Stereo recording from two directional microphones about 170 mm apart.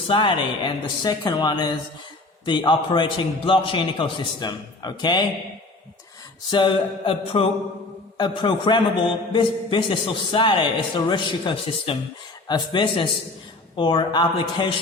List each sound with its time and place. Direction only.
0.1 s a man's voice: 30° left (ahead or behind)
6.5 s mantra: 30° left (ahead or behind)
8.2 s a man's voice: 30° left (ahead or behind)